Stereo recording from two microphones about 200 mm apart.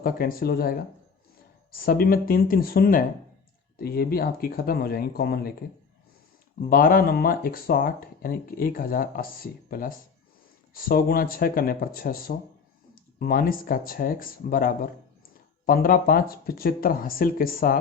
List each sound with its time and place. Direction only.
0.0 s speech: 45° left (ahead or behind)